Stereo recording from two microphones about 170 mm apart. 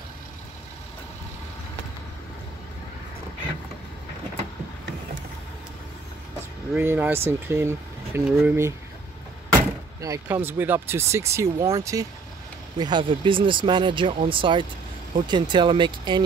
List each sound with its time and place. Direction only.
6.8 s speech: 15° right (ahead or behind)
9.9 s speech: 20° right (ahead or behind)